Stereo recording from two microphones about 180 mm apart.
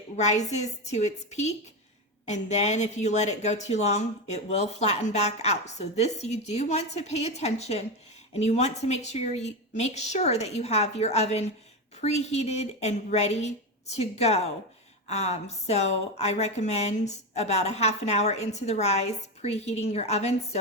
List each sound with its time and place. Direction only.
0.2 s speech: 40° left (ahead or behind)